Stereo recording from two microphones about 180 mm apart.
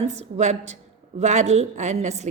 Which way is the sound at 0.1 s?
40° right (ahead or behind).